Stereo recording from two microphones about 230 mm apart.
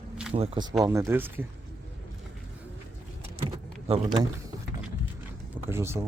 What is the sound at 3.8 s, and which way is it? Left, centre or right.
Speech, right.